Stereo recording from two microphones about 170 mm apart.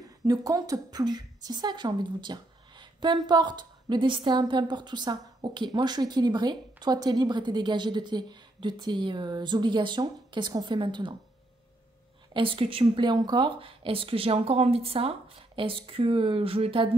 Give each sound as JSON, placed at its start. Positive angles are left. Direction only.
{"t": 0.3, "sound": "a woman's voice", "side_deg": -20}
{"t": 12.4, "sound": "speech", "side_deg": -30}